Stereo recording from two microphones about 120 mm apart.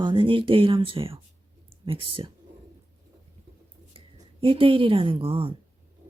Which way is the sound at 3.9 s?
50° right (ahead or behind).